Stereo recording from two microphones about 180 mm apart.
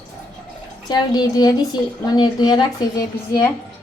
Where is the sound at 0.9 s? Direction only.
20° left (ahead or behind).